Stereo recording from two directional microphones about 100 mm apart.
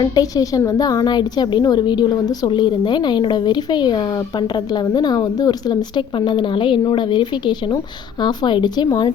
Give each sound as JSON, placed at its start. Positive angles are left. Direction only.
{"t": 0.0, "sound": "a woman's voice", "side_deg": 40}